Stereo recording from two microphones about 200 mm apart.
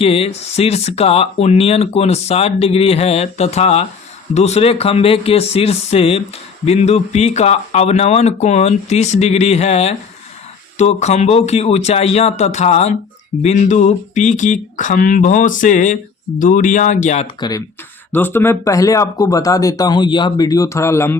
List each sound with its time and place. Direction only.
0.0 s speech: 30° left (ahead or behind)
18.1 s speech: 10° left (ahead or behind)